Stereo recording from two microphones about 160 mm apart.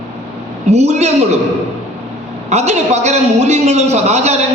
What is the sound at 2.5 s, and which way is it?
A man's voice, 45° right (ahead or behind).